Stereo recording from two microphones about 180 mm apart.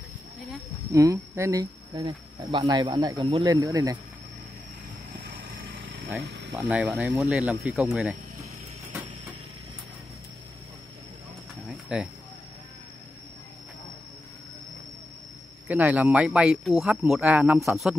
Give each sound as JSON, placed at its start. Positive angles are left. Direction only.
{"t": 0.9, "sound": "speech", "side_deg": -20}
{"t": 6.2, "sound": "a sound", "side_deg": -75}
{"t": 6.5, "sound": "speech", "side_deg": -10}
{"t": 11.6, "sound": "pigeon", "side_deg": -5}
{"t": 15.7, "sound": "speech", "side_deg": -10}